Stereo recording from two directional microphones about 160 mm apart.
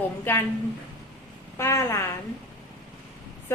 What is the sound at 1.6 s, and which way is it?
Speech, 15° left (ahead or behind).